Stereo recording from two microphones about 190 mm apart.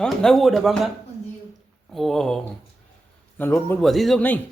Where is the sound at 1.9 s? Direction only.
Centre (ahead or behind).